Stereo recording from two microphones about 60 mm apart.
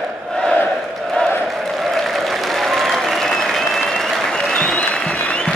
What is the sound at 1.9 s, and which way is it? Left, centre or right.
Applause, centre.